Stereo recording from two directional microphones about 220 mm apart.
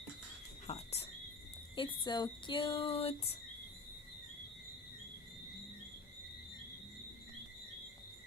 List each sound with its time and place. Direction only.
0.7 s whispering: 30° left (ahead or behind)
1.7 s speech: 20° left (ahead or behind)